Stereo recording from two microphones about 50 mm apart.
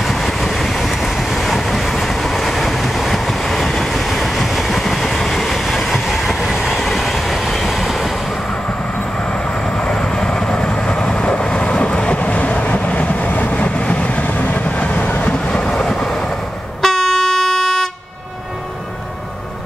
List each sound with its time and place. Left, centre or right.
0.0 s train: centre
9.3 s vehicle: centre; by 15.3 s left
15.7 s vehicle: centre
16.8 s train: centre